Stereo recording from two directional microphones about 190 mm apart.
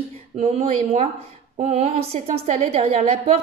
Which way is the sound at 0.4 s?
35° right (ahead or behind).